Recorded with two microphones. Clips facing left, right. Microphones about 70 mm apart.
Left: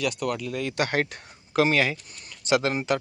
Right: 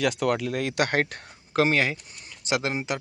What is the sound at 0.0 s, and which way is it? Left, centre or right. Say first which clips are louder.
Speech: right 3 dB; right.